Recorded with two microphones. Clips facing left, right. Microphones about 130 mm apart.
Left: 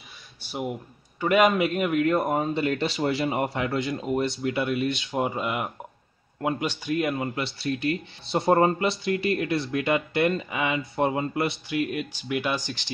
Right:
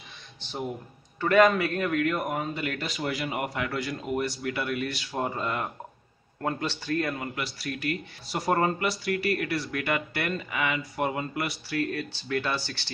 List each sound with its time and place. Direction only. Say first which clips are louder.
0.4 s a man's voice: left 3 dB; 10° left (ahead or behind)
7.3 s speech: left 5 dB; 25° left (ahead or behind)